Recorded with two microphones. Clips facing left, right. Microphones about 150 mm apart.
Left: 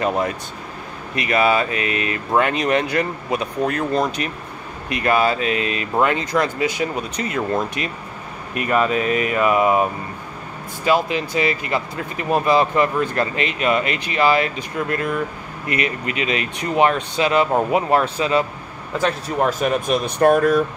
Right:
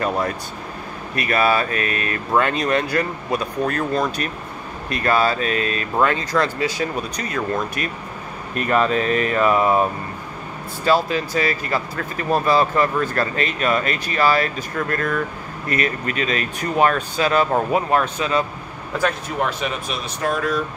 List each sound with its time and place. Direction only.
0.0 s speech: 20° left (ahead or behind)
8.5 s speech: 10° left (ahead or behind); by 18.4 s 25° left (ahead or behind)
19.4 s speech: 50° left (ahead or behind)